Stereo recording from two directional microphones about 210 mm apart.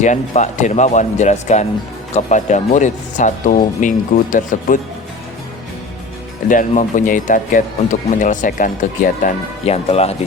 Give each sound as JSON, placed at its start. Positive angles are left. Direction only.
{"t": 0.0, "sound": "speech", "side_deg": 35}
{"t": 6.5, "sound": "speech", "side_deg": 40}